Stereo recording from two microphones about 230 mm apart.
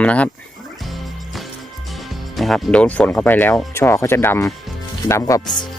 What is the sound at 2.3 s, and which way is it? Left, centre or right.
Speech, centre.